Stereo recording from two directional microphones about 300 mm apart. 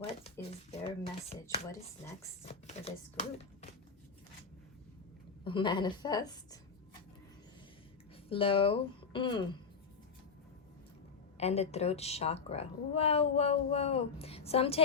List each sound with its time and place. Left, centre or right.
0.9 s a woman's voice: centre
5.5 s speech: centre
8.3 s speech: centre
11.3 s a woman's voice: left